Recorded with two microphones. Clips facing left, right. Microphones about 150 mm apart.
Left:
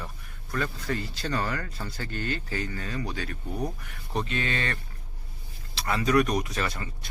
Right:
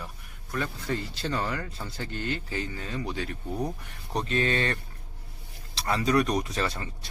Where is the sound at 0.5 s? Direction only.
20° right (ahead or behind).